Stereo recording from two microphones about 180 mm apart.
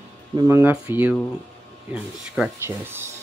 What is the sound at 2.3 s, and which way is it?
Speech, 10° right (ahead or behind).